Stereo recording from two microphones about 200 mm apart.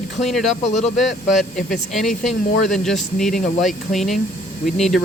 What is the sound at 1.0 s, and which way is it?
Speech, centre (ahead or behind).